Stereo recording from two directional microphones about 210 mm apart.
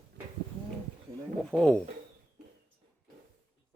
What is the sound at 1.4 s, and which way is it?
Speech, 5° left (ahead or behind).